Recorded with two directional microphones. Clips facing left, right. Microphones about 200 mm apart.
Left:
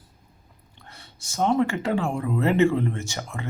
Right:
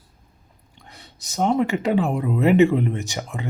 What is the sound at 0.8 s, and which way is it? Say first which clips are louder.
A man's voice: right 2 dB; 15° right (ahead or behind).